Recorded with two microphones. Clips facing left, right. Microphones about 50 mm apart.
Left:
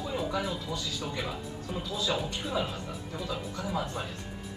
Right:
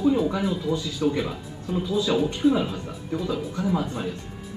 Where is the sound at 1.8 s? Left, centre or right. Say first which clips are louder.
Right 8 dB; centre.